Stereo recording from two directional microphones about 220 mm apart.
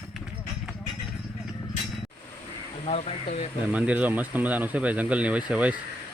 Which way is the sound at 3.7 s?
5° right (ahead or behind).